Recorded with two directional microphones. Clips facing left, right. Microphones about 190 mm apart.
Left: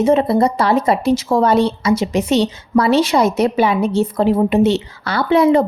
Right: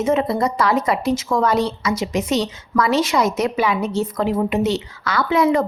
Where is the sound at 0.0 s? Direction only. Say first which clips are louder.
Left 5 dB; 35° left (ahead or behind).